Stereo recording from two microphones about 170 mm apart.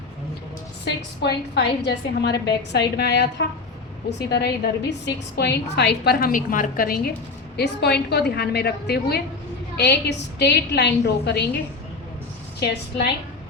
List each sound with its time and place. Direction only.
1.2 s a woman's voice: 75° left (ahead or behind); by 7.1 s 60° left (ahead or behind)
7.5 s a woman's voice: 75° left (ahead or behind)
9.7 s a woman's voice: 90° left
12.5 s a woman's voice: 75° left (ahead or behind)